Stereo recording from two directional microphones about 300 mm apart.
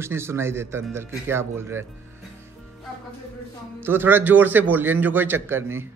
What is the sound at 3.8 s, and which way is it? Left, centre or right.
A man's voice, centre.